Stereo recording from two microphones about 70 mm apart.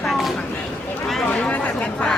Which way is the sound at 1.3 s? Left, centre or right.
Centre.